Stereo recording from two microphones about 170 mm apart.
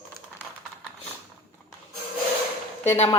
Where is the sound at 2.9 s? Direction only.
35° left (ahead or behind).